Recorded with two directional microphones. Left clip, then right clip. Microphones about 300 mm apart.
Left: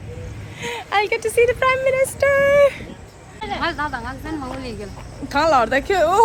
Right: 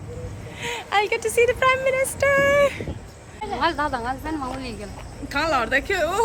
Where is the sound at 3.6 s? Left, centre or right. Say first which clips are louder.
Right 2 dB; right; by 4.8 s centre.